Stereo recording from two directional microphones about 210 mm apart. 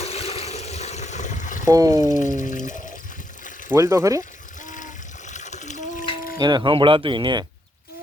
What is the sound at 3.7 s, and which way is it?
Speech, 15° right (ahead or behind).